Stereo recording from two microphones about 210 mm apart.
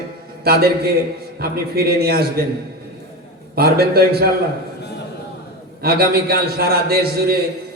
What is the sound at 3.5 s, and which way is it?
Speech, 45° right (ahead or behind).